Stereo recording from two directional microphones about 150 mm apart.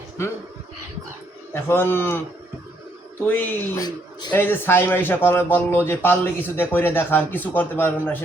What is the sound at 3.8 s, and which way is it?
Speech, 30° left (ahead or behind).